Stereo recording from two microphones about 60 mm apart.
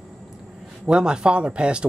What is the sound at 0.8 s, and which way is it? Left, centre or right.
Speech, centre.